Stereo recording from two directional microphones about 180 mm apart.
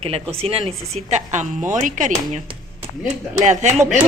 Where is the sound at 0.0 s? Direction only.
30° right (ahead or behind).